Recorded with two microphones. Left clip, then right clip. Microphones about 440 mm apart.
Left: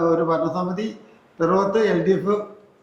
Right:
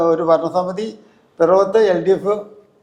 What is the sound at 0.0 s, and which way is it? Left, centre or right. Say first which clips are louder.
A man's voice: right 5 dB; right.